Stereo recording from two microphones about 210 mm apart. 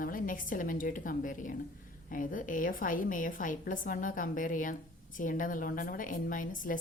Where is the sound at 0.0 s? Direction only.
40° left (ahead or behind).